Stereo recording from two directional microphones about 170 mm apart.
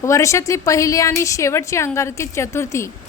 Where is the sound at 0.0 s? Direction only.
15° left (ahead or behind).